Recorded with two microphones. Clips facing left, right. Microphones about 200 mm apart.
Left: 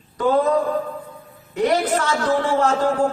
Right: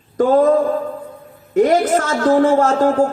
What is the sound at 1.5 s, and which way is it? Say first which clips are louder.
A man's voice: right 6 dB; 45° right (ahead or behind).